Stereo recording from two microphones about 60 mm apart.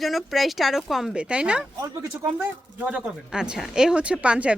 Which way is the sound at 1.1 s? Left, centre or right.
Centre.